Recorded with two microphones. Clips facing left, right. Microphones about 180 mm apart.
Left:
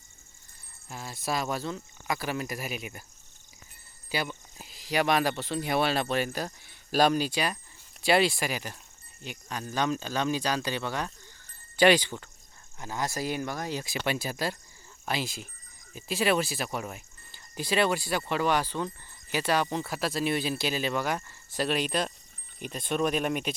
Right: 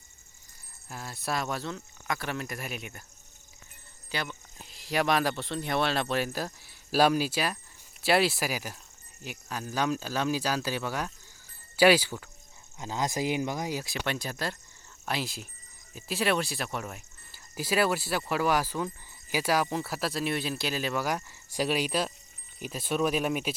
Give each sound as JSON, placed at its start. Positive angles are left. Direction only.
{"t": 0.9, "sound": "speech", "side_deg": 0}
{"t": 4.1, "sound": "speech", "side_deg": 5}
{"t": 12.8, "sound": "speech", "side_deg": -15}
{"t": 13.8, "sound": "speech", "side_deg": 5}